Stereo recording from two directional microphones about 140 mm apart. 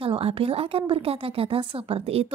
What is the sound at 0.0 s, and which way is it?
A woman's voice, 40° right (ahead or behind).